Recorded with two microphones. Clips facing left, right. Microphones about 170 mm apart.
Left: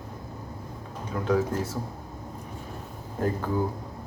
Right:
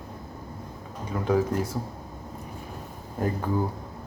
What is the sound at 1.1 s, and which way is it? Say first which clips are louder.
Speech: right 1 dB; 5° right (ahead or behind).